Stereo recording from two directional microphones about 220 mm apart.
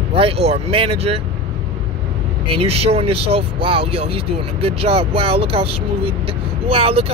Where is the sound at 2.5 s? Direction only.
25° right (ahead or behind).